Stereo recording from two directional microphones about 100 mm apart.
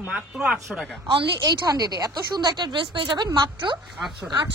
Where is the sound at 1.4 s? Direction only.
40° right (ahead or behind).